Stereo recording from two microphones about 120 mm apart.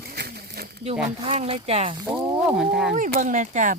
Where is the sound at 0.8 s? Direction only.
60° right (ahead or behind).